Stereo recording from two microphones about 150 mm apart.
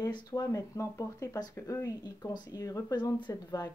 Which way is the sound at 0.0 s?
25° left (ahead or behind).